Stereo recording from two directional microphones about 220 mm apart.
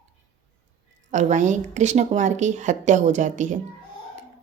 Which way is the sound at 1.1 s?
35° right (ahead or behind).